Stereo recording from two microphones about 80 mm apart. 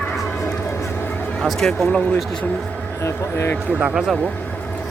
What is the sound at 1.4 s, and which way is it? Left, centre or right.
Speech, centre.